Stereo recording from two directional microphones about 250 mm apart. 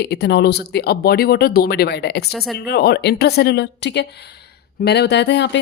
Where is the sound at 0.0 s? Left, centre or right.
Left.